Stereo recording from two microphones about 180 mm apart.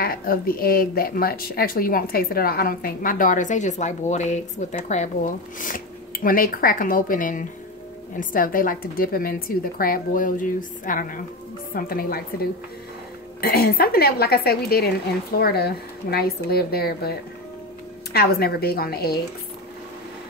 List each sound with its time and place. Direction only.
0.0 s a woman's voice: 55° left (ahead or behind)
13.4 s speech: 60° left (ahead or behind)